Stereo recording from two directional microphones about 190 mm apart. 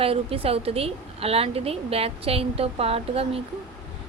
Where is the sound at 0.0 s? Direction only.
30° right (ahead or behind).